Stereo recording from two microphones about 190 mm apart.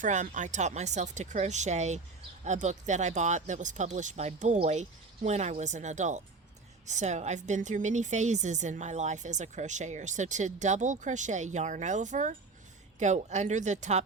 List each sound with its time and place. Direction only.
0.0 s a woman's voice: 40° right (ahead or behind)